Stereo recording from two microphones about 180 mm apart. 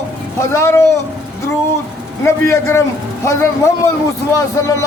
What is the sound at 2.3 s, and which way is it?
A man's voice, 15° left (ahead or behind).